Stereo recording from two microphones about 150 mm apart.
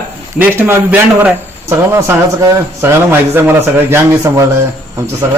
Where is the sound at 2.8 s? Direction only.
15° right (ahead or behind).